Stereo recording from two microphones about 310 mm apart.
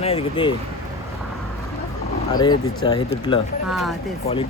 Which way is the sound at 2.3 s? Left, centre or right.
Centre.